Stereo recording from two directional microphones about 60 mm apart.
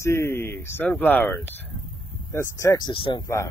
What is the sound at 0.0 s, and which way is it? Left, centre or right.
Speech, left.